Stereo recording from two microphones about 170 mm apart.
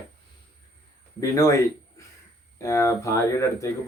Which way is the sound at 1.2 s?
20° left (ahead or behind).